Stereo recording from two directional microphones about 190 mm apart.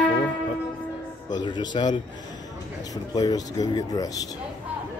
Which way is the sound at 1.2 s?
25° left (ahead or behind).